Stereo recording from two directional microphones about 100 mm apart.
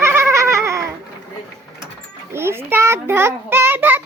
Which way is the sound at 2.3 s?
25° right (ahead or behind).